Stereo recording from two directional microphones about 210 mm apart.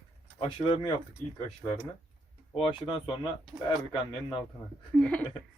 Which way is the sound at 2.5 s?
25° left (ahead or behind).